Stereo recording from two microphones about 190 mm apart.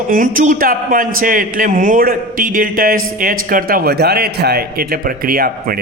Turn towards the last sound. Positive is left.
turn(degrees=-50)  # may be behind; listen again after turning